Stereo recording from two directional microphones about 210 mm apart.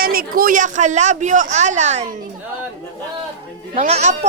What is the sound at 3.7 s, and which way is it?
Speech, 30° right (ahead or behind).